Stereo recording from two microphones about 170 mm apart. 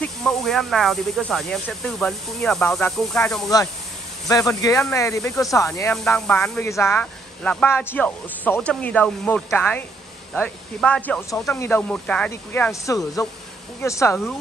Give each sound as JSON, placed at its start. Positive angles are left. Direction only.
{"t": 0.0, "sound": "speech", "side_deg": 5}
{"t": 4.3, "sound": "speech", "side_deg": 20}
{"t": 6.0, "sound": "speech", "side_deg": 5}